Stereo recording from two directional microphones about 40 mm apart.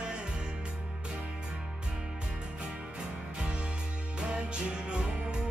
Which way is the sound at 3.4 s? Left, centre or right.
Right.